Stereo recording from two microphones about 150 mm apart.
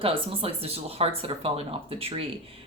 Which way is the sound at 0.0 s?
40° right (ahead or behind).